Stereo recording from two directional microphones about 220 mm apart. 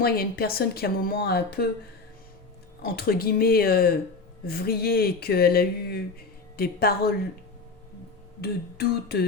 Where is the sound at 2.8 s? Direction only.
45° left (ahead or behind).